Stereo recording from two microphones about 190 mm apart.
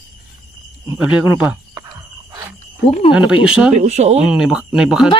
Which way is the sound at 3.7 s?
35° right (ahead or behind).